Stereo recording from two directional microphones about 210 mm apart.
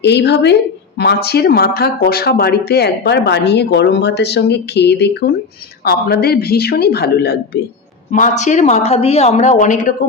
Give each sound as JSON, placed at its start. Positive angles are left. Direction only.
{"t": 0.0, "sound": "speech", "side_deg": 55}
{"t": 8.1, "sound": "speech", "side_deg": 35}